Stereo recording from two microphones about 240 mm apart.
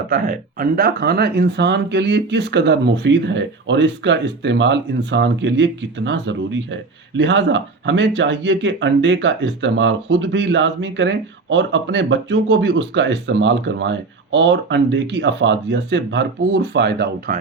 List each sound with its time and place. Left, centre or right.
0.1 s speech: right